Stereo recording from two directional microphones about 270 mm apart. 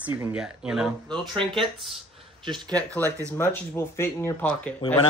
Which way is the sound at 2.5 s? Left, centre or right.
Centre.